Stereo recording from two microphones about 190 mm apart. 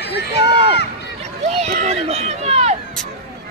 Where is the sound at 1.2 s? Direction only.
35° right (ahead or behind).